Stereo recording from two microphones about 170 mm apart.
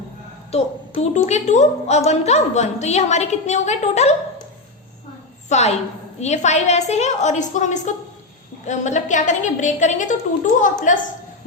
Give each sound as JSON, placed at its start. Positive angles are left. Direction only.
{"t": 0.5, "sound": "a woman's voice", "side_deg": 45}
{"t": 5.5, "sound": "a woman's voice", "side_deg": 40}